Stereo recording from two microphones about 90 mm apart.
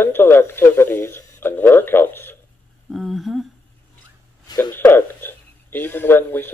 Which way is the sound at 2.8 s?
Centre (ahead or behind).